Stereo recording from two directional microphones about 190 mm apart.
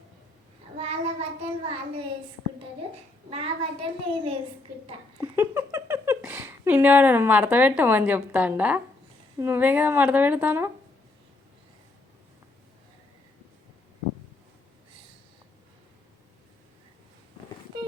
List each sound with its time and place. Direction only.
0.8 s child singing: 35° right (ahead or behind)
3.2 s a child's voice: 30° right (ahead or behind)
5.2 s speech: 15° right (ahead or behind)